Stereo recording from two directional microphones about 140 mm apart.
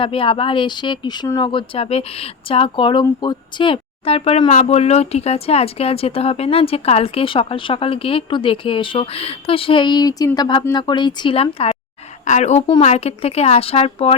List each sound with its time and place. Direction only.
0.0 s speech: 40° left (ahead or behind)
12.2 s a woman's voice: 55° left (ahead or behind)